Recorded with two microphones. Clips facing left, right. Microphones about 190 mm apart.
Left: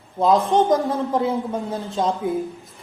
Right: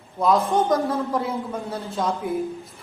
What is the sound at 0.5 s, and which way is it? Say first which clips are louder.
A man's voice: left 3 dB; 20° left (ahead or behind).